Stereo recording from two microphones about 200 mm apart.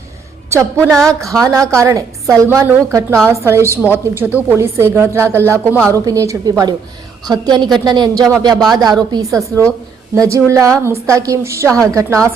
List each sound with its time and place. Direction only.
0.8 s a woman's voice: 5° left (ahead or behind)
1.5 s a woman's voice: 15° right (ahead or behind)